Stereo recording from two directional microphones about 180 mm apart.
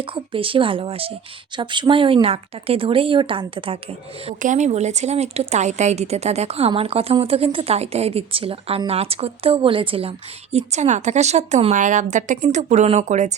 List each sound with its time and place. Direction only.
0.0 s speech: 30° right (ahead or behind)
4.3 s speech: 40° right (ahead or behind)